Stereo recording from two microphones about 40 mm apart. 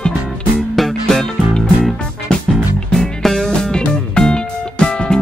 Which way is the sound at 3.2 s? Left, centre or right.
Centre.